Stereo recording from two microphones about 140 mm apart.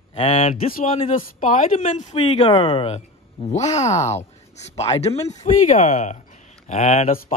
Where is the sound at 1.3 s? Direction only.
65° left (ahead or behind); by 5.2 s 50° left (ahead or behind).